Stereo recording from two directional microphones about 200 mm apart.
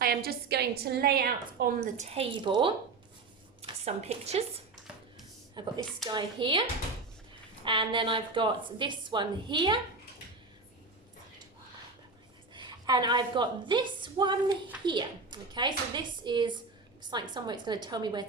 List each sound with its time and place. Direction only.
0.0 s a woman's voice: 50° right (ahead or behind)
2.0 s a woman's voice: 30° right (ahead or behind)
12.5 s a woman's voice: 20° right (ahead or behind)